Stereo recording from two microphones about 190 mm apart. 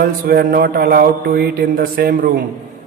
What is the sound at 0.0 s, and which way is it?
A man's voice, 55° right (ahead or behind).